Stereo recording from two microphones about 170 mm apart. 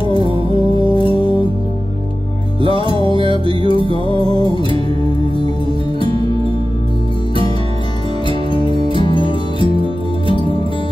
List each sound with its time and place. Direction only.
0.9 s music: 30° left (ahead or behind)
2.6 s music: 30° right (ahead or behind)
8.6 s music: 30° right (ahead or behind)
9.0 s music: 30° left (ahead or behind)
9.6 s music: 30° right (ahead or behind)